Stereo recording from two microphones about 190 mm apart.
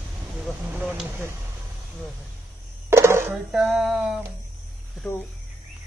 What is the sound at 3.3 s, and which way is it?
Music, centre (ahead or behind).